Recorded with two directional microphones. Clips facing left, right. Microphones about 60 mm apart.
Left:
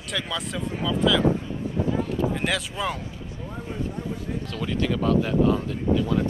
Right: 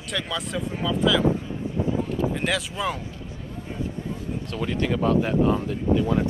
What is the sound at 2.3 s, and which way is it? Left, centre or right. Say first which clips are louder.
Speech: even; centre.